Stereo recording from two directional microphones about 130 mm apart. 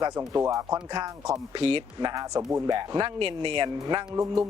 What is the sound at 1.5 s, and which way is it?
Speech, 45° right (ahead or behind).